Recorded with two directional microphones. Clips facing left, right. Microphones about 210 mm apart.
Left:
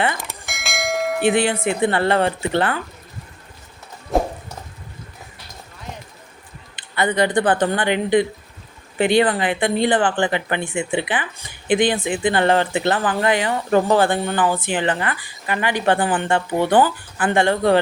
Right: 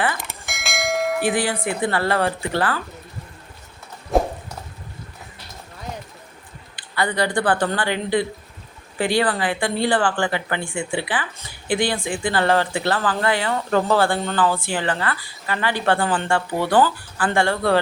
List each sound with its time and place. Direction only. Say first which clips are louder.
0.2 s church bell: left 1 dB; centre (ahead or behind)
1.2 s speech: left 4 dB; 25° left (ahead or behind)
4.1 s clip-clop: right 1 dB; centre (ahead or behind)
6.7 s speech: left 3 dB; 20° left (ahead or behind)